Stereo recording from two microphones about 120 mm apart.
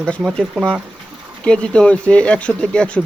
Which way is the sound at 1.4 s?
10° left (ahead or behind).